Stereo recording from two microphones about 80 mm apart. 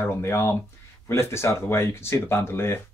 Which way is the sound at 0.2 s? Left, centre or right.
Left.